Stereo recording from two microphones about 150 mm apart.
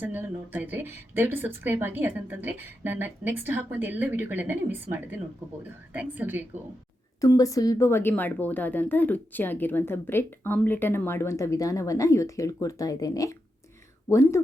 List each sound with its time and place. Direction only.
0.0 s speech: 10° right (ahead or behind)
7.2 s speech: 20° left (ahead or behind)